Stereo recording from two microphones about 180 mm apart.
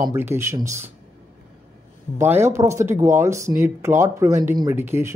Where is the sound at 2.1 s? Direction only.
15° right (ahead or behind).